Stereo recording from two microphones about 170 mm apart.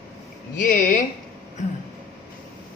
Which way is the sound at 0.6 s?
50° left (ahead or behind).